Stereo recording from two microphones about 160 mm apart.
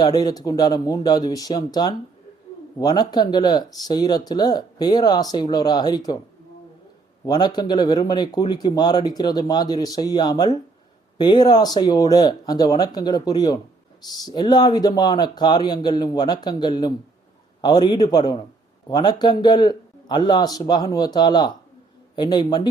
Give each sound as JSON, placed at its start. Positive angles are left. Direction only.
{"t": 0.0, "sound": "speech", "side_deg": 25}
{"t": 7.3, "sound": "speech", "side_deg": 25}